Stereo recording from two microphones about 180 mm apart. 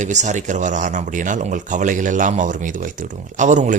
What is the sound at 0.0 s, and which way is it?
Speech, 40° right (ahead or behind).